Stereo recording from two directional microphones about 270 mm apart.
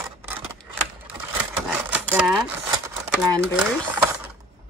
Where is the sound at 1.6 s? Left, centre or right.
Centre.